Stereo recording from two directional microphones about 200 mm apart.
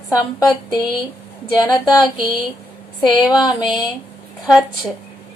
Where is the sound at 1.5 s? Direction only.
20° left (ahead or behind).